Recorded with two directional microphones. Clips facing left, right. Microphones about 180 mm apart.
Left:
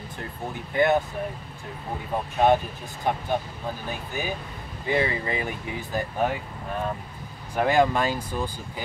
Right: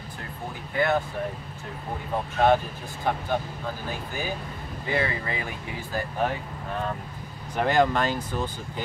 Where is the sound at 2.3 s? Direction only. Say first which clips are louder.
Left 1 dB; 15° left (ahead or behind).